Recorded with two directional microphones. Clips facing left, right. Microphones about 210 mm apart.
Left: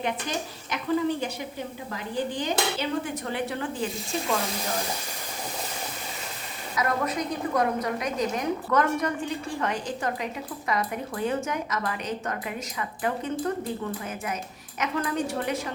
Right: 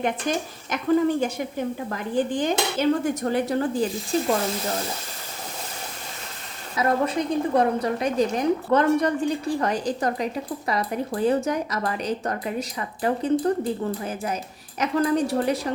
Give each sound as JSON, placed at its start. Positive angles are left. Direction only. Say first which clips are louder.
{"t": 0.0, "sound": "dishes", "louder": "right 5 dB", "side_deg": -50}
{"t": 6.7, "sound": "a woman's voice", "louder": "right 5 dB", "side_deg": -30}